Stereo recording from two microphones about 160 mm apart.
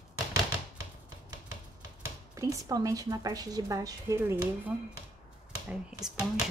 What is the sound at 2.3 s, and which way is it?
A woman's voice, 20° right (ahead or behind).